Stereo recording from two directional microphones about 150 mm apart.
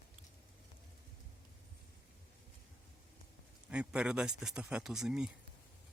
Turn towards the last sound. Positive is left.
turn(degrees=-5)  # may be behind; listen again after turning